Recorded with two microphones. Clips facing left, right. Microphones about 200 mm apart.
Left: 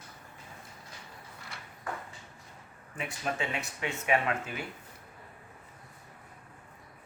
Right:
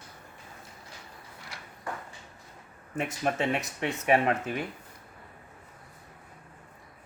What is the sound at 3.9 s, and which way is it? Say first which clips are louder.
Speech: right 5 dB; 40° right (ahead or behind).